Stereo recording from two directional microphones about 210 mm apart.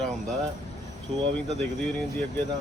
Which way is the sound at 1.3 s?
5° left (ahead or behind).